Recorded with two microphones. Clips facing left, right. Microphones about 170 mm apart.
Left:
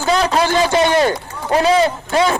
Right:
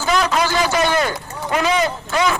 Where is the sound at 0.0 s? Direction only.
30° left (ahead or behind).